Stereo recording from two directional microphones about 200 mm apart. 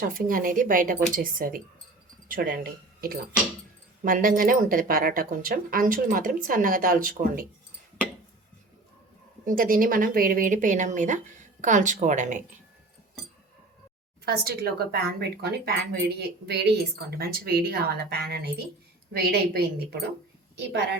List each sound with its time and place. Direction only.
0.0 s a woman's voice: 45° right (ahead or behind)
4.0 s a woman's voice: 45° right (ahead or behind)
9.5 s speech: 45° right (ahead or behind)
14.3 s a woman's voice: 50° right (ahead or behind)